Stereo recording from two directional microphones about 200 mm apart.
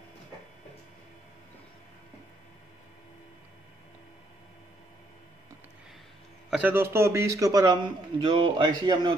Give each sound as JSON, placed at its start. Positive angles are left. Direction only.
{"t": 6.5, "sound": "a man's voice", "side_deg": -10}